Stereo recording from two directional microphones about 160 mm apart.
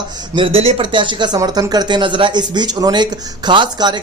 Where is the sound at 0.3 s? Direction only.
35° right (ahead or behind).